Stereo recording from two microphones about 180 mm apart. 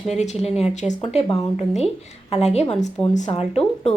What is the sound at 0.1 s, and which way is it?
A woman's voice, 40° left (ahead or behind).